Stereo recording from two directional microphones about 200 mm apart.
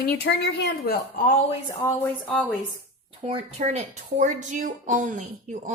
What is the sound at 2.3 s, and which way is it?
Speech, 5° left (ahead or behind).